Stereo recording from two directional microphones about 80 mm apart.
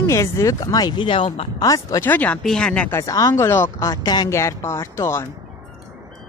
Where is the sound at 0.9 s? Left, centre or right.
Left.